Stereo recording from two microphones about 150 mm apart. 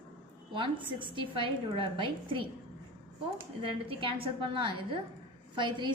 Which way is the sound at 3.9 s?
35° right (ahead or behind).